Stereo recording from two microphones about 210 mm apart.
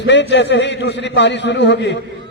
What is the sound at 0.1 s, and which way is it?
A man's voice, 55° left (ahead or behind).